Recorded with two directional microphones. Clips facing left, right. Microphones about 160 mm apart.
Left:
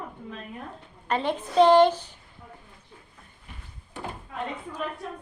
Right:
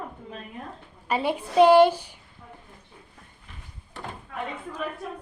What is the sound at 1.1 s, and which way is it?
A child's voice, 10° right (ahead or behind).